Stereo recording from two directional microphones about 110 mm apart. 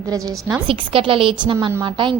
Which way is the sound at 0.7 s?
55° right (ahead or behind).